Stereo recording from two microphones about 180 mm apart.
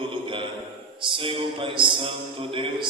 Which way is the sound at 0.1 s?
30° right (ahead or behind).